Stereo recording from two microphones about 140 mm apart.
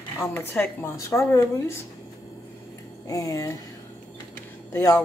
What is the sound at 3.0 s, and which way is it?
Speech, 25° left (ahead or behind).